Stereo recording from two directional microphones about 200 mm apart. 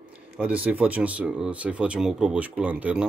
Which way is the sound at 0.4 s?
5° right (ahead or behind).